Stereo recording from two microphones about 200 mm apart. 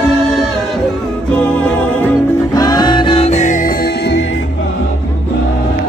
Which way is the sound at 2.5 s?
20° left (ahead or behind).